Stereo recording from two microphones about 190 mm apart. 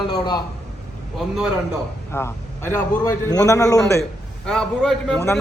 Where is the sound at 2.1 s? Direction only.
15° left (ahead or behind).